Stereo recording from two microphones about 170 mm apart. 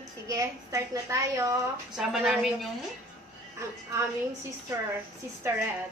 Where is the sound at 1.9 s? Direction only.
Centre (ahead or behind).